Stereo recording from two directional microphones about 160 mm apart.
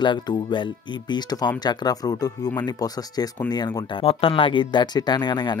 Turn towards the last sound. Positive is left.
turn(degrees=25)  # may be behind; listen again after turning